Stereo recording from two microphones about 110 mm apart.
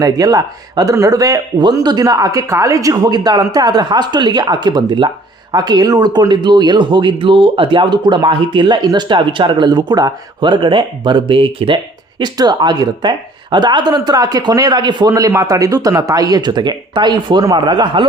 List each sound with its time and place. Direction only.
0.0 s speech: 35° right (ahead or behind); by 11.8 s 50° right (ahead or behind)
12.2 s speech: 40° right (ahead or behind)